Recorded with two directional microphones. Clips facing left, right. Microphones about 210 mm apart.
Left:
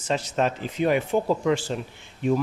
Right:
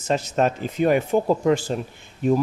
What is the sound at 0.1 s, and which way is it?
A man's voice, 45° right (ahead or behind).